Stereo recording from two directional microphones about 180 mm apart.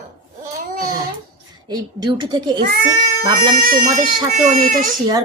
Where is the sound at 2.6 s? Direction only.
50° right (ahead or behind).